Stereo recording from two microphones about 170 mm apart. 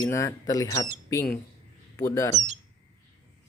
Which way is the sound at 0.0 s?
15° left (ahead or behind).